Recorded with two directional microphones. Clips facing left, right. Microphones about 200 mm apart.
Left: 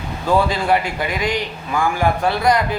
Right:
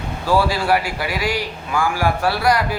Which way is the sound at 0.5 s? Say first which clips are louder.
Left 1 dB; 20° left (ahead or behind).